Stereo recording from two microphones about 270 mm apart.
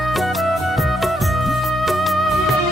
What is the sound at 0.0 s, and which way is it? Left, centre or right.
Music, centre.